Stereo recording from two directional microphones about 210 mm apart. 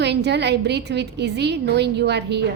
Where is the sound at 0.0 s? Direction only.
55° right (ahead or behind).